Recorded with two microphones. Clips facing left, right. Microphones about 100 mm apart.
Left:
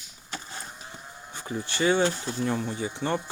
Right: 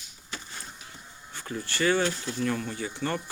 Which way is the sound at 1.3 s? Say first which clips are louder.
Left 1 dB; 20° left (ahead or behind).